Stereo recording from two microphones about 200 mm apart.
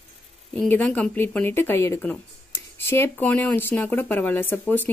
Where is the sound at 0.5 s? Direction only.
5° left (ahead or behind).